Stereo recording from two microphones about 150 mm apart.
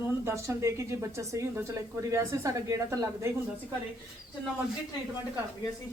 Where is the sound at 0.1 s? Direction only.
20° right (ahead or behind).